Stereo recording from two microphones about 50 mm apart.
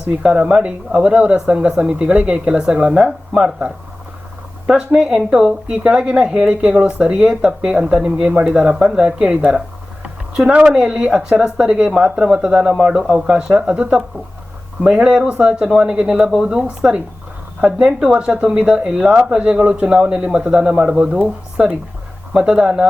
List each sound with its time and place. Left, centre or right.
0.2 s speech: centre
4.9 s speech: centre